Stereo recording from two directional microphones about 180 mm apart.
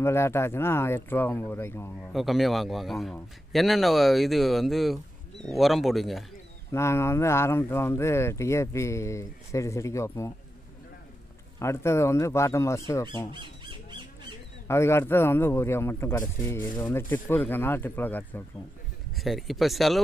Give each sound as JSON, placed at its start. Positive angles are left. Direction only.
{"t": 0.0, "sound": "speech", "side_deg": 15}
{"t": 2.0, "sound": "speech", "side_deg": 0}
{"t": 6.7, "sound": "speech", "side_deg": 15}
{"t": 11.6, "sound": "speech", "side_deg": 15}
{"t": 13.3, "sound": "squawk", "side_deg": -25}
{"t": 14.7, "sound": "speech", "side_deg": 15}
{"t": 19.1, "sound": "speech", "side_deg": 0}